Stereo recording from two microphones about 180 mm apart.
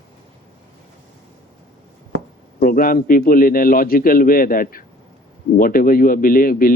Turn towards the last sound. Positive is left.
turn(degrees=50)  # may be behind; listen again after turning